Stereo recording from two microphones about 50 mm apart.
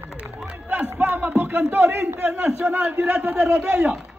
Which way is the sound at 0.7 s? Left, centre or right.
Right.